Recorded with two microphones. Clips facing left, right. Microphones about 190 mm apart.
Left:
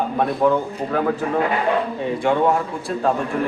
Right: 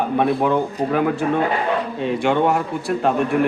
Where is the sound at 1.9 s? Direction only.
75° right (ahead or behind).